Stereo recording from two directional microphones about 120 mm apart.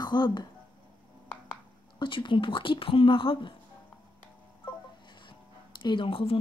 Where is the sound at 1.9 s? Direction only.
45° left (ahead or behind).